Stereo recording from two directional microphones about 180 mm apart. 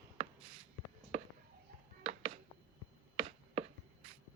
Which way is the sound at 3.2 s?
35° right (ahead or behind).